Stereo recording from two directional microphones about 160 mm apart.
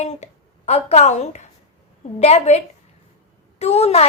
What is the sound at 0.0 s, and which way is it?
A woman's voice, 45° left (ahead or behind).